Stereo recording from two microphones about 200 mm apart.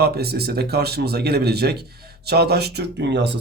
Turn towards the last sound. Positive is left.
turn(degrees=-60)  # may be behind; listen again after turning